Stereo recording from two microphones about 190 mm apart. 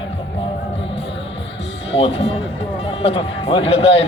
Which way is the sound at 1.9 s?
30° left (ahead or behind).